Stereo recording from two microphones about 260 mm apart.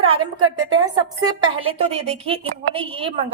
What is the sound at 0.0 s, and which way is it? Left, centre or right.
A woman's voice, right.